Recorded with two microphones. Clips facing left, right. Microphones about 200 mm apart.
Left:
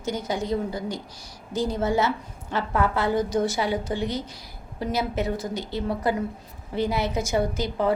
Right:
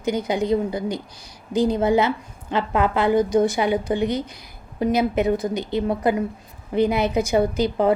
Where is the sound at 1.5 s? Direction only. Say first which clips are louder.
Right 6 dB; 15° right (ahead or behind).